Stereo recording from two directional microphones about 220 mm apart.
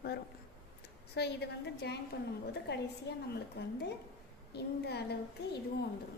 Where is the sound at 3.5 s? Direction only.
45° left (ahead or behind).